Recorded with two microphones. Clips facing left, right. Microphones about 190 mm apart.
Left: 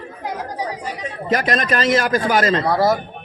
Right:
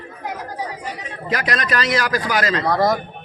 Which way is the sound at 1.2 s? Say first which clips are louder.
Left 3 dB; 50° left (ahead or behind).